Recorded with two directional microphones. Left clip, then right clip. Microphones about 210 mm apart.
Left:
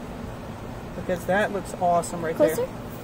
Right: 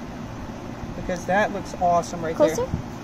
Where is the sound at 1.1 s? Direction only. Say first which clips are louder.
Right 1 dB; 15° left (ahead or behind).